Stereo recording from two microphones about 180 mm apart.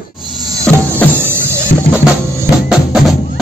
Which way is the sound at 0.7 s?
5° left (ahead or behind).